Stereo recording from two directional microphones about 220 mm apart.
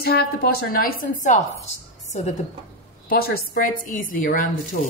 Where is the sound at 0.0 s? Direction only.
40° left (ahead or behind).